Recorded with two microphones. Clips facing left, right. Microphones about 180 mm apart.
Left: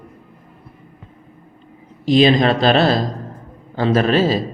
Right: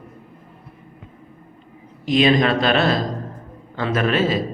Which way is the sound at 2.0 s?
30° left (ahead or behind).